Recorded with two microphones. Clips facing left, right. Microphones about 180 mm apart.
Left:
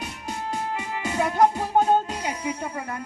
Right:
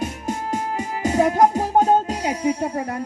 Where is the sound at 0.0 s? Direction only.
45° right (ahead or behind).